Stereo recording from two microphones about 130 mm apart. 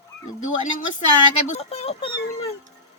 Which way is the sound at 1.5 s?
50° left (ahead or behind).